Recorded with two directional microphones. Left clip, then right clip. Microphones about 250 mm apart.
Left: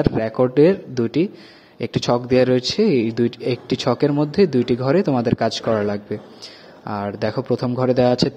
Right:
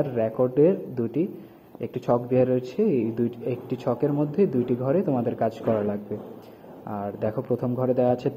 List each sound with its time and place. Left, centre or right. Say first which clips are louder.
0.2 s speech: left 4 dB; left